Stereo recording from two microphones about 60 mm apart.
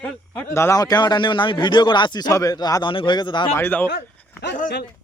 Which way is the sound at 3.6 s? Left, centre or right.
Left.